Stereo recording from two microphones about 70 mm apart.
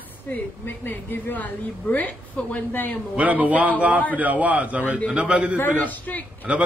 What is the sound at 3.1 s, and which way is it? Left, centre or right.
Speech, right.